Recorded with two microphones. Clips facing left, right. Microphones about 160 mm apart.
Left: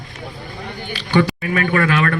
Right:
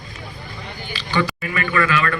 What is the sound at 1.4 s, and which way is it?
Speech, 50° left (ahead or behind).